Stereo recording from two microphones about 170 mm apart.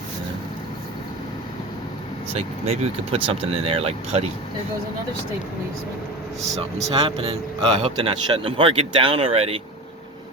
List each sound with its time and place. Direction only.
2.3 s speech: 35° right (ahead or behind)
6.6 s speech: 35° right (ahead or behind)